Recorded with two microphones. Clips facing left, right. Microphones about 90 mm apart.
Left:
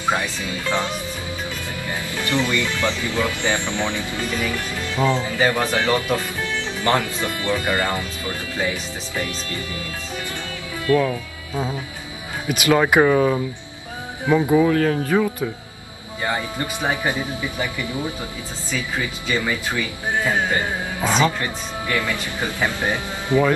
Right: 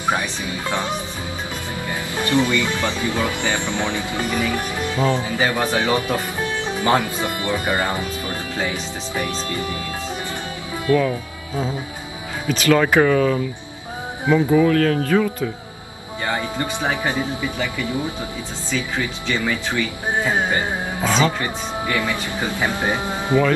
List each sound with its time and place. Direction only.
0.0 s speech: 20° right (ahead or behind)
10.9 s speech: 25° right (ahead or behind)
12.4 s speech: 15° left (ahead or behind)
18.7 s speech: 5° left (ahead or behind)
20.2 s carnatic music: 20° right (ahead or behind)
21.0 s speech: 5° left (ahead or behind)
21.4 s speech: 15° right (ahead or behind)